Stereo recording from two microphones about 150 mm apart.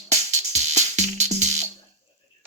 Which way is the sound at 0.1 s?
50° right (ahead or behind).